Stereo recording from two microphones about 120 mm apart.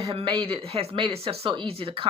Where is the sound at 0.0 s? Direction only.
50° right (ahead or behind).